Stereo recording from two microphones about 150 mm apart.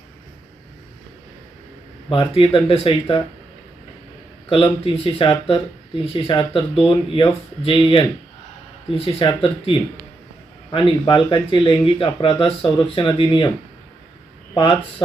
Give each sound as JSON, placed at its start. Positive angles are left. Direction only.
{"t": 2.0, "sound": "speech", "side_deg": 35}
{"t": 4.4, "sound": "speech", "side_deg": 40}
{"t": 14.5, "sound": "speech", "side_deg": 35}